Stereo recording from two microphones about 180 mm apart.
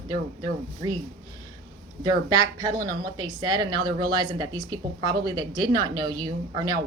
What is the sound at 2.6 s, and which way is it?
Speech, 20° right (ahead or behind).